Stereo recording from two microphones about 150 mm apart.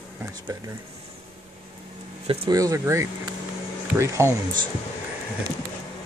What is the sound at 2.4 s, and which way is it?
Speech, 25° right (ahead or behind).